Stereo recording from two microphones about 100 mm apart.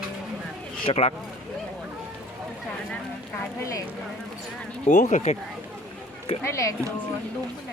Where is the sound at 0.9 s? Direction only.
90° left.